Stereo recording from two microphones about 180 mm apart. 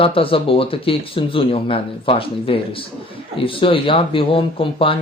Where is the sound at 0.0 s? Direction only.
30° left (ahead or behind).